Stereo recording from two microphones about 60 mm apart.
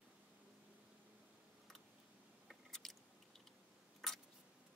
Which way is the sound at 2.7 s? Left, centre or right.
Centre.